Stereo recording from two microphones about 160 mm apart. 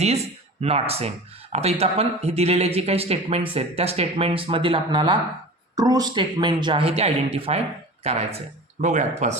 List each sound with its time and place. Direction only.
0.6 s speech: 40° right (ahead or behind)